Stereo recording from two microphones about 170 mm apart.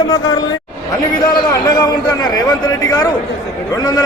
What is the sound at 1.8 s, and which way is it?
A man's voice, 25° left (ahead or behind).